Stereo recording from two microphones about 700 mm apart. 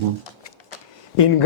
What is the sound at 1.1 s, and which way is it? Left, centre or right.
Speech, left.